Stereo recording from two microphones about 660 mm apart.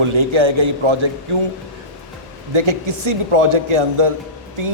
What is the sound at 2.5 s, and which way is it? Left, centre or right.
A man's voice, right.